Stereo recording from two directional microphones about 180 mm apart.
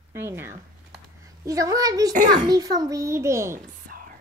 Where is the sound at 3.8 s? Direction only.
55° right (ahead or behind).